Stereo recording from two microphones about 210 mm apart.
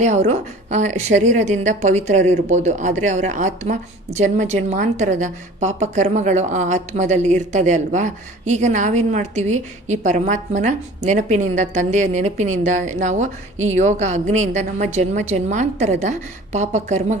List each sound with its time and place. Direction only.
0.0 s a woman's voice: 35° right (ahead or behind)